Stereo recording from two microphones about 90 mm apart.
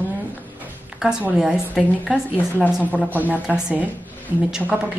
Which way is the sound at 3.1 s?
20° right (ahead or behind).